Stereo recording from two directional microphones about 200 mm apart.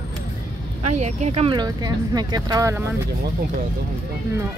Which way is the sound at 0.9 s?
35° right (ahead or behind).